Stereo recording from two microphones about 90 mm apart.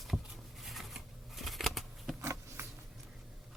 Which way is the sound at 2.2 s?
30° right (ahead or behind).